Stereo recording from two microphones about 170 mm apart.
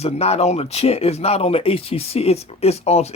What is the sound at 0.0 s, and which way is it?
Speech, 35° left (ahead or behind).